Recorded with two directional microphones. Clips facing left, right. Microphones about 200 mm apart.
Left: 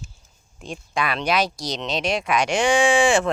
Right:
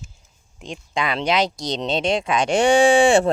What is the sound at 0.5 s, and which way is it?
Speech, 20° right (ahead or behind).